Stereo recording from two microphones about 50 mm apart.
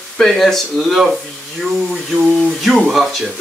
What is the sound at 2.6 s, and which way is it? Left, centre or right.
Speech, centre.